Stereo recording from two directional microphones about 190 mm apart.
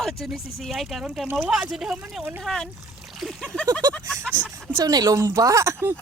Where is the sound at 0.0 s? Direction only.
Centre (ahead or behind).